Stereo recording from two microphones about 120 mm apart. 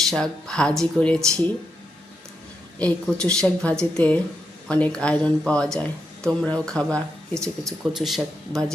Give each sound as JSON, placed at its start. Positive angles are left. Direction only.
{"t": 0.1, "sound": "speech", "side_deg": 5}
{"t": 2.7, "sound": "speech", "side_deg": 10}